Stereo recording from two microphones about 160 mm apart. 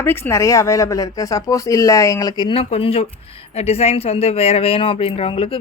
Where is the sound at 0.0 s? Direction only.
15° left (ahead or behind).